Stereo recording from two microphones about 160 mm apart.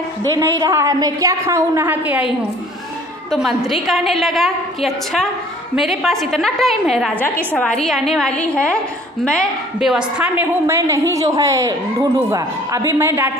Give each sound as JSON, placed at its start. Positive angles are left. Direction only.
{"t": 0.4, "sound": "a woman's voice", "side_deg": -20}